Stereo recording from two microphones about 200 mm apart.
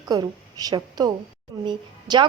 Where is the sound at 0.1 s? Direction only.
20° right (ahead or behind).